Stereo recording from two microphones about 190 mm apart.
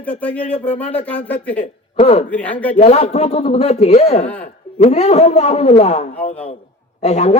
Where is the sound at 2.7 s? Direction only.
35° left (ahead or behind).